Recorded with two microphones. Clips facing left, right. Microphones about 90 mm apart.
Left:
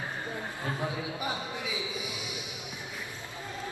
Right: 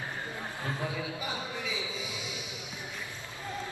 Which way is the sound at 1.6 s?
15° left (ahead or behind).